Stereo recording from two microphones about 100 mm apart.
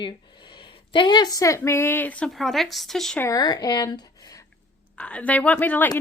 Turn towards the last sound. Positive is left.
turn(degrees=15)  # may be behind; listen again after turning